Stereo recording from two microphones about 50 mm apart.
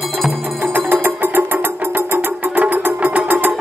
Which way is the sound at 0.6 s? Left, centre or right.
Right.